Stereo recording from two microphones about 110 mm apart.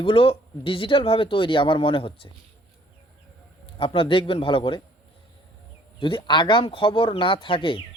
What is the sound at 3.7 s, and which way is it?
Speech, 55° left (ahead or behind).